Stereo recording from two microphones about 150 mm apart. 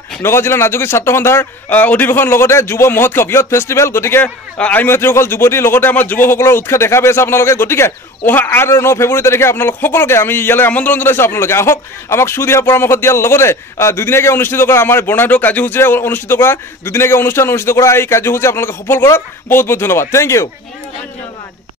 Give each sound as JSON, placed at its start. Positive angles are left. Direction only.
{"t": 0.2, "sound": "a man's voice", "side_deg": 15}